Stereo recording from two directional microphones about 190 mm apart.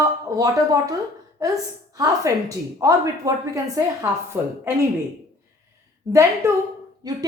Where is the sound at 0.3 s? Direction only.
20° right (ahead or behind).